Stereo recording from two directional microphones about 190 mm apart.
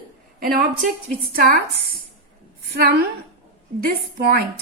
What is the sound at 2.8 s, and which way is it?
Speech, 50° right (ahead or behind).